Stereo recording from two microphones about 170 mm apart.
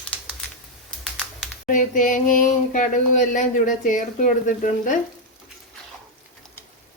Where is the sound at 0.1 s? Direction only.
10° left (ahead or behind).